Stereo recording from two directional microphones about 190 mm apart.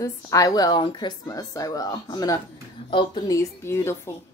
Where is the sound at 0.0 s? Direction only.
20° left (ahead or behind).